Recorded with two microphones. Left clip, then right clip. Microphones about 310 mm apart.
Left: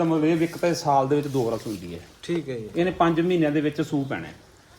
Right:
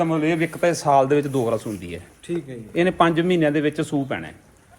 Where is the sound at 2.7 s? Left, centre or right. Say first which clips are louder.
Right 4 dB; right.